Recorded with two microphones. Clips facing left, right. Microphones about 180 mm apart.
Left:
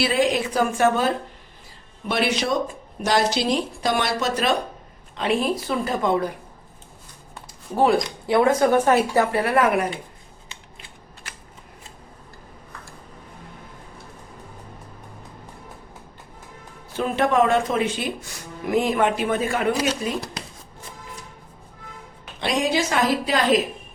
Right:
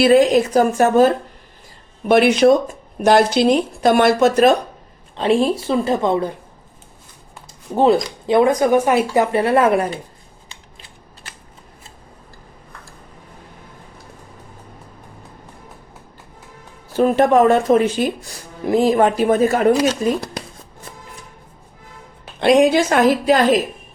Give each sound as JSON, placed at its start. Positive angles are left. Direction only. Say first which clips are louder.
{"t": 0.0, "sound": "speech", "louder": "right 9 dB", "side_deg": -45}
{"t": 2.0, "sound": "speech", "louder": "right 11 dB", "side_deg": -55}
{"t": 5.1, "sound": "a woman's voice", "louder": "right 6 dB", "side_deg": -30}
{"t": 8.3, "sound": "speech", "louder": "right 4 dB", "side_deg": -15}
{"t": 16.9, "sound": "speech", "louder": "right 7 dB", "side_deg": -40}
{"t": 22.4, "sound": "speech", "louder": "right 10 dB", "side_deg": -55}